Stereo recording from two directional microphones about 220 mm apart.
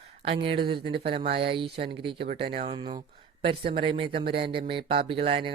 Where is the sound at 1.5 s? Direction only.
25° right (ahead or behind).